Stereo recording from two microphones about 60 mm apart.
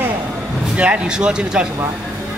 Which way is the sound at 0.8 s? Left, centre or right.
Centre.